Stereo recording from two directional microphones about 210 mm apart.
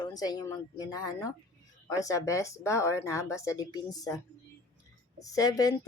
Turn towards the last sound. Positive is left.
turn(degrees=15)  # may be behind; listen again after turning